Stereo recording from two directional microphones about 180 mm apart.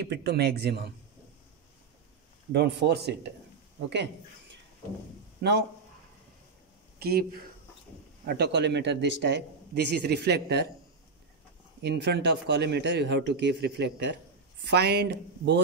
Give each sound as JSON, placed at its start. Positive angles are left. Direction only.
{"t": 0.0, "sound": "speech", "side_deg": -60}
{"t": 2.5, "sound": "speech", "side_deg": -70}
{"t": 5.4, "sound": "speech", "side_deg": -65}
{"t": 7.0, "sound": "speech", "side_deg": -60}
{"t": 8.3, "sound": "speech", "side_deg": -70}
{"t": 11.8, "sound": "speech", "side_deg": -70}